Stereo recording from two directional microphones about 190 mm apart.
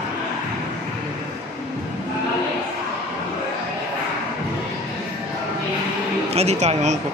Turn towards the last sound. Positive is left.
turn(degrees=-35)  # may be behind; listen again after turning